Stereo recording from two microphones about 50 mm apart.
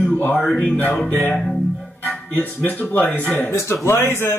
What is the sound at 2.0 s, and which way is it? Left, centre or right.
Speech, left.